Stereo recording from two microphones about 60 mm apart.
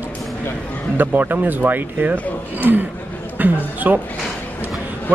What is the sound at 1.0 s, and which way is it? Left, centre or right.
A man's voice, right.